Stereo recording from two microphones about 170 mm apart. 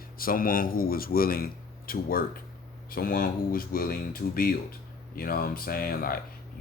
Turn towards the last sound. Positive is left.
turn(degrees=60)  # may be behind; listen again after turning